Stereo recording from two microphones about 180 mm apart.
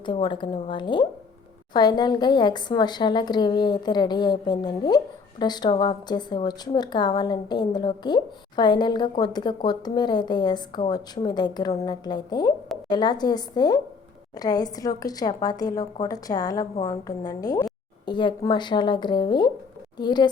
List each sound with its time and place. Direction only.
0.0 s a woman's voice: 25° left (ahead or behind)